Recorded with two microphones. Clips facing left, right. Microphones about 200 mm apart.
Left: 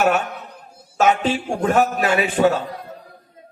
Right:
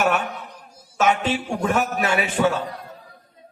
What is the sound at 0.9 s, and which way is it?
A man's voice, 35° left (ahead or behind).